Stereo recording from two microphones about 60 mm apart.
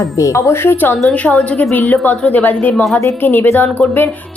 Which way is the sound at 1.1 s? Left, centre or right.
Left.